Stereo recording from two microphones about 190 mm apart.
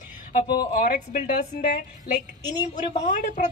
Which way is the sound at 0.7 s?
45° left (ahead or behind).